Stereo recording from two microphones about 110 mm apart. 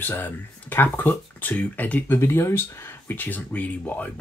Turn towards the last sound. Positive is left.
turn(degrees=15)  # may be behind; listen again after turning